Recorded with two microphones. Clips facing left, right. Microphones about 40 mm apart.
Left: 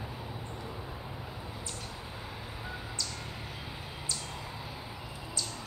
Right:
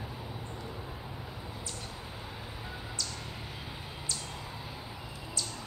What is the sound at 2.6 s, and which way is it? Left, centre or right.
Bird, centre.